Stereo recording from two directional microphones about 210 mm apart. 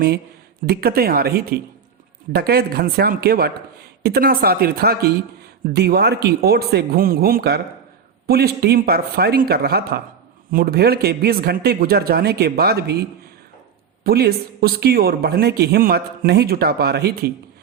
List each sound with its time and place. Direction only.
0.6 s a man's voice: 45° right (ahead or behind)